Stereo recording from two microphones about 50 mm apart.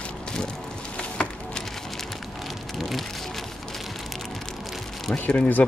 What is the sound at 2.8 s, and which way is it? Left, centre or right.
Speech, centre.